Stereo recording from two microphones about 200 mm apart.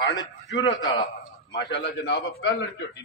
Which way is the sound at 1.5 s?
55° left (ahead or behind).